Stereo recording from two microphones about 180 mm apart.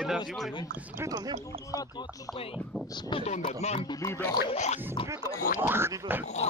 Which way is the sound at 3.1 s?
40° left (ahead or behind).